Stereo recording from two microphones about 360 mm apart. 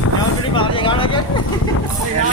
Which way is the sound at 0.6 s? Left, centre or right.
Centre.